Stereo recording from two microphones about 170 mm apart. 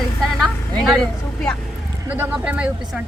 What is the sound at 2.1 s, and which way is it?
Speech, 10° right (ahead or behind).